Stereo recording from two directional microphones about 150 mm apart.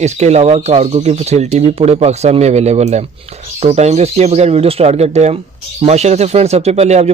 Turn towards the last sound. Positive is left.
turn(degrees=-45)  # may be behind; listen again after turning